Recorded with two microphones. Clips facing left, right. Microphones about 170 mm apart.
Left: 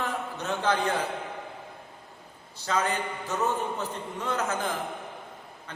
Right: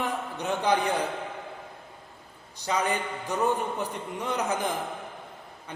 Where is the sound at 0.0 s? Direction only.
15° right (ahead or behind).